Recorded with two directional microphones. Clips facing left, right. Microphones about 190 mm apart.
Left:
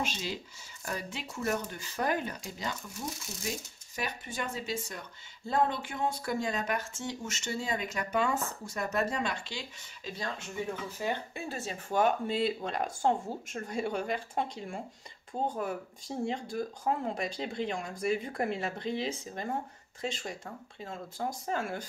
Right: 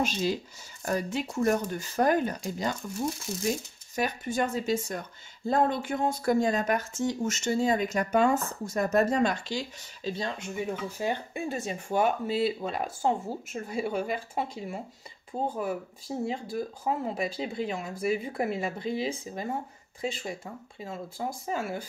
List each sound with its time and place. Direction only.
0.0 s speech: 45° right (ahead or behind)
3.9 s speech: 45° right (ahead or behind)
11.0 s speech: 15° right (ahead or behind)